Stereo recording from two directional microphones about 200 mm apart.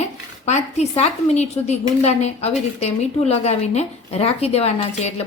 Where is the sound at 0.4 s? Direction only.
35° left (ahead or behind).